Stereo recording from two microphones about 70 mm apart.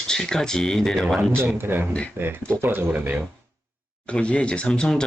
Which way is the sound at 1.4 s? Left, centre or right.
Right.